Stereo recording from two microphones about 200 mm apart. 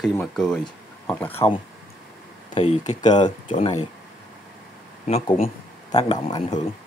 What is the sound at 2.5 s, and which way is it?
Speech, 30° left (ahead or behind).